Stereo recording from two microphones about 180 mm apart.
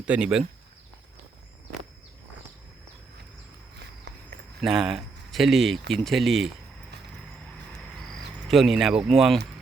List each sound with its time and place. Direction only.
0.0 s speech: 5° right (ahead or behind)
3.8 s walk: 70° right (ahead or behind)
4.6 s speech: centre (ahead or behind)
7.8 s cricket: centre (ahead or behind)
9.0 s speech: centre (ahead or behind)